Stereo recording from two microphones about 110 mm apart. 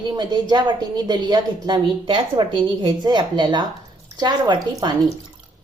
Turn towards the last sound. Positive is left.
turn(degrees=-40)  # may be behind; listen again after turning